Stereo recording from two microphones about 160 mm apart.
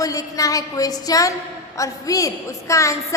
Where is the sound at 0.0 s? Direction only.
20° left (ahead or behind).